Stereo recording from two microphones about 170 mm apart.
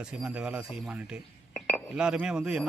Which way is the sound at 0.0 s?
5° right (ahead or behind).